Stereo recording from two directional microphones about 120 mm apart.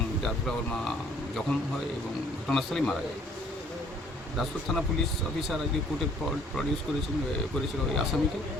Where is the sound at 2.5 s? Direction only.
5° left (ahead or behind).